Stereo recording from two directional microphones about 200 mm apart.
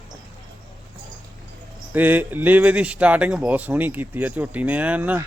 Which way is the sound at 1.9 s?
10° right (ahead or behind).